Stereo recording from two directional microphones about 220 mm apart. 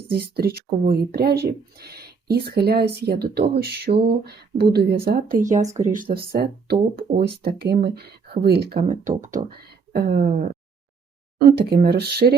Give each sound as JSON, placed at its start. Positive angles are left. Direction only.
{"t": 0.1, "sound": "speech", "side_deg": -45}
{"t": 8.9, "sound": "speech", "side_deg": -35}